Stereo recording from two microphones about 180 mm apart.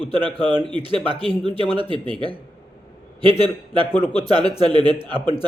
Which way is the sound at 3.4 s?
30° left (ahead or behind).